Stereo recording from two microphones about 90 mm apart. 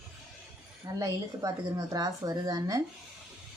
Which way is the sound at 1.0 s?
40° right (ahead or behind).